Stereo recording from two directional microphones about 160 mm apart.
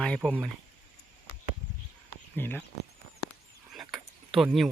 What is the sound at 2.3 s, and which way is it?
Speech, 10° left (ahead or behind).